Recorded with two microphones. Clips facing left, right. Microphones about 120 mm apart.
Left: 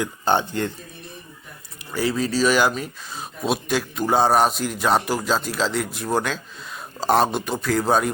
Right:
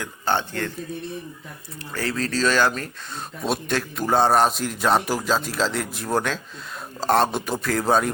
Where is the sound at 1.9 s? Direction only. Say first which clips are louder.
Left 4 dB; 10° left (ahead or behind).